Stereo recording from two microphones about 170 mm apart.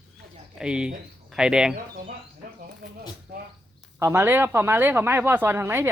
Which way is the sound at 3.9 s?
15° right (ahead or behind).